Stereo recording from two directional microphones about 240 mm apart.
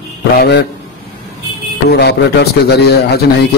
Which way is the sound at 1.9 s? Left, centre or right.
Left.